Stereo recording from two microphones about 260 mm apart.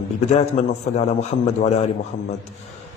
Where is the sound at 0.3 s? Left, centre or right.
Left.